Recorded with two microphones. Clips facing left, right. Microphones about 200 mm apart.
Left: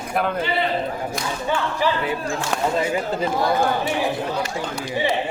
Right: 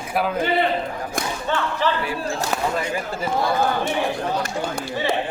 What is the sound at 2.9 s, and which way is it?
Speech, 20° left (ahead or behind).